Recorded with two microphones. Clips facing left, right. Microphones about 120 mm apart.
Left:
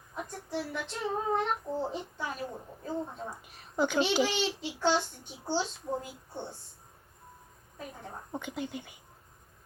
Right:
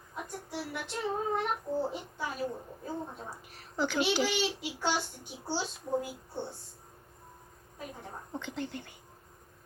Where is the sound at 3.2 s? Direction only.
20° left (ahead or behind).